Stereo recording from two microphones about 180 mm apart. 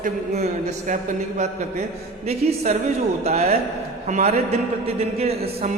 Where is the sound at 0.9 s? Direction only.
45° right (ahead or behind).